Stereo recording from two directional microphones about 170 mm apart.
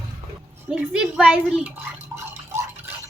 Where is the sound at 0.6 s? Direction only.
5° right (ahead or behind).